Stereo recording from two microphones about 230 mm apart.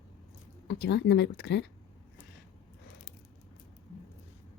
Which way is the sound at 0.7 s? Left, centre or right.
Left.